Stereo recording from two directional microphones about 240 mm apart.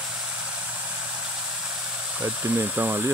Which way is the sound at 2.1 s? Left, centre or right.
Centre.